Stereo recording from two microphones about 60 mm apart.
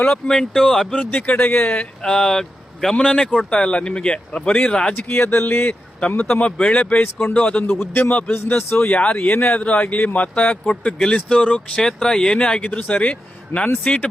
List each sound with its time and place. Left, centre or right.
0.1 s speech: centre
1.5 s speech: left
1.8 s speech: centre
5.1 s speech: left
6.0 s speech: left
7.0 s speech: left
7.3 s speech: centre
7.7 s speech: left
11.8 s speech: centre